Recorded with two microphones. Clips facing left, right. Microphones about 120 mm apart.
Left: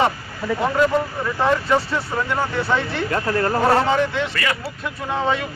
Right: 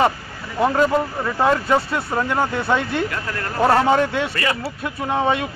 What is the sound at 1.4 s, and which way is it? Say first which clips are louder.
Speech: right 1 dB; 20° right (ahead or behind).